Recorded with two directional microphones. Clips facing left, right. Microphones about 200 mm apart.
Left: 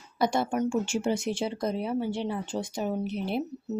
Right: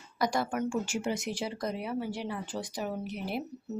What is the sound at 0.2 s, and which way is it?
Speech, 25° left (ahead or behind).